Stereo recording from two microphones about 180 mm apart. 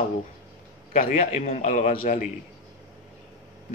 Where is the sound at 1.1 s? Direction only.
40° left (ahead or behind).